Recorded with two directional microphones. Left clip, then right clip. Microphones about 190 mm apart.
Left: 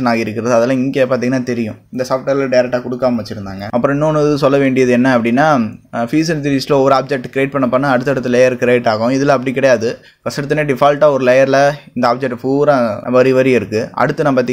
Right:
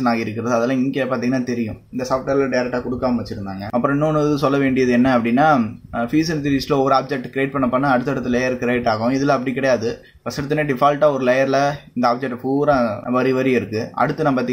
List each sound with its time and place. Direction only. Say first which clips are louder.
0.0 s speech: left 5 dB; 35° left (ahead or behind)
3.7 s speech: left 5 dB; 30° left (ahead or behind)